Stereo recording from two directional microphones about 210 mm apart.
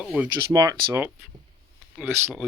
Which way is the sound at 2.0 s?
5° right (ahead or behind).